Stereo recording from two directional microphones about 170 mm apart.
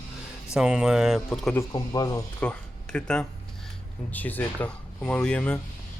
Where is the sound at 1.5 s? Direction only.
15° left (ahead or behind).